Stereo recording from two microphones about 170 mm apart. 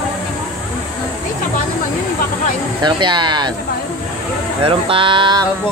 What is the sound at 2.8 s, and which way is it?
Speech, 25° right (ahead or behind).